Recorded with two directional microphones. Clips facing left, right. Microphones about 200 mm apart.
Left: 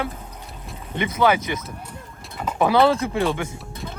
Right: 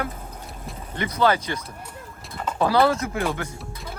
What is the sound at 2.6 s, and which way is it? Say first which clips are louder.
Speech: left 2 dB; 20° left (ahead or behind).